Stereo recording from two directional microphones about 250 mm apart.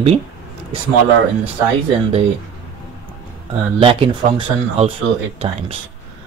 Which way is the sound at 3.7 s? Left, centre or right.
Right.